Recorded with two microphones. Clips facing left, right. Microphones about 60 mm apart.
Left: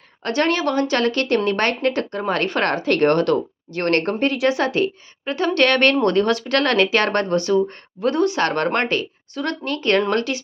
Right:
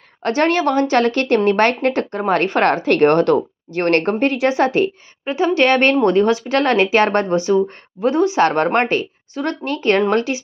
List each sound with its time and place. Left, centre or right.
0.2 s a woman's voice: right
5.2 s a woman's voice: centre